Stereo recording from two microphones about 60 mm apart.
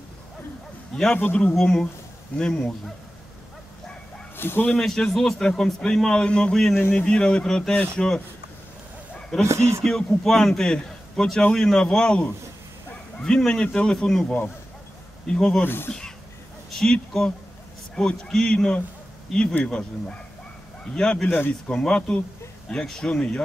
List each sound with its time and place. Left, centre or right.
1.1 s speech: left
1.5 s a man's voice: centre
4.4 s speech: left
4.7 s a man's voice: centre
9.5 s speech: right
9.8 s a man's voice: centre
15.6 s speech: left
16.7 s a man's voice: centre
21.3 s speech: left
21.6 s a man's voice: centre